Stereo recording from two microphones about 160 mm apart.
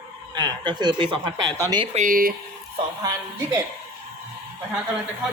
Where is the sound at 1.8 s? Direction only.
40° right (ahead or behind).